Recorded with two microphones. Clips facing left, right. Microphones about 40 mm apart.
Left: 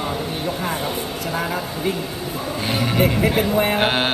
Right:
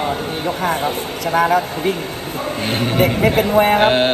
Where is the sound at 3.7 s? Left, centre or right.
Centre.